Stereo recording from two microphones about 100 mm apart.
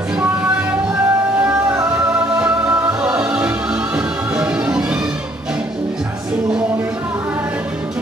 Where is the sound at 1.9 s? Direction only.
15° right (ahead or behind).